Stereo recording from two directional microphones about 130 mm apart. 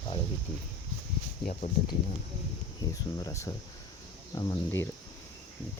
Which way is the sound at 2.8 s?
25° left (ahead or behind).